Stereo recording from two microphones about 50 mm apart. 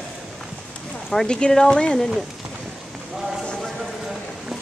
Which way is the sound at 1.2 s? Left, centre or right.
Centre.